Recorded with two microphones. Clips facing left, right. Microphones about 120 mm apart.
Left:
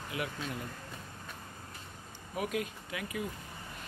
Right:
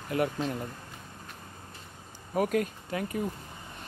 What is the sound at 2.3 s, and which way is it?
Speech, 45° right (ahead or behind).